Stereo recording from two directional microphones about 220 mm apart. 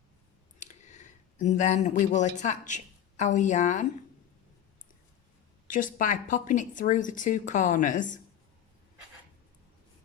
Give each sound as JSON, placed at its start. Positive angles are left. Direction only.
{"t": 0.6, "sound": "speech", "side_deg": 35}
{"t": 5.6, "sound": "speech", "side_deg": 35}